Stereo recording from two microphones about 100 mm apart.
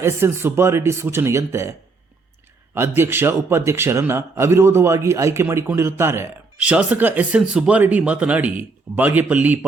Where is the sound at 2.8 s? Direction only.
25° right (ahead or behind).